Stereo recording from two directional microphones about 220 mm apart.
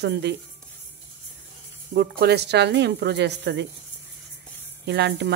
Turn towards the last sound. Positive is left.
turn(degrees=-50)  # may be behind; listen again after turning